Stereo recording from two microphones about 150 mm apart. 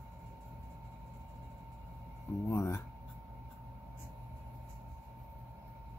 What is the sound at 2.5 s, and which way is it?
Speech, 15° left (ahead or behind).